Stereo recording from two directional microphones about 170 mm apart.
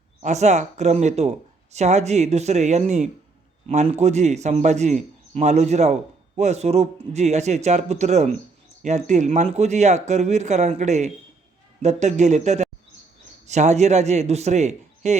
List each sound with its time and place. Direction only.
0.2 s a man's voice: 45° right (ahead or behind)